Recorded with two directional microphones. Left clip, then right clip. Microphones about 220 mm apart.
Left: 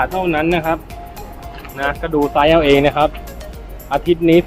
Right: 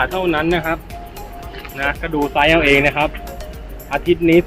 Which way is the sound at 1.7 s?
30° left (ahead or behind).